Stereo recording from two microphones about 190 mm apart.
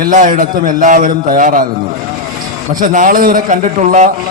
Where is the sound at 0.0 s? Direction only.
45° right (ahead or behind).